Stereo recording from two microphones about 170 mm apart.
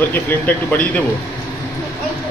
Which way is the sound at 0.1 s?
10° left (ahead or behind).